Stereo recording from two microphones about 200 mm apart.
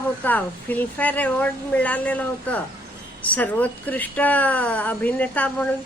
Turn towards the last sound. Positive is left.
turn(degrees=5)  # may be behind; listen again after turning